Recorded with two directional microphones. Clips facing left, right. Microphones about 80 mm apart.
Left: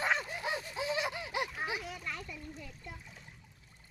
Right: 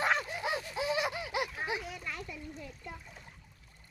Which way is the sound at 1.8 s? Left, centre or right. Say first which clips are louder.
Even; centre.